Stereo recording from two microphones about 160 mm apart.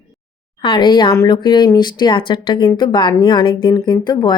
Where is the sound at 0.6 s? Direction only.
30° left (ahead or behind).